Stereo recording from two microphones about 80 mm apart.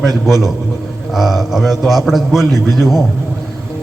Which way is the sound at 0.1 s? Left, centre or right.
Right.